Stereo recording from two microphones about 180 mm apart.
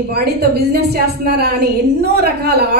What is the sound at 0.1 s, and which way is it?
A woman's voice, 60° right (ahead or behind).